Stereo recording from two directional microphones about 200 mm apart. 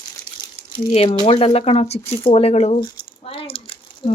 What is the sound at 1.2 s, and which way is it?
Speech, 30° left (ahead or behind).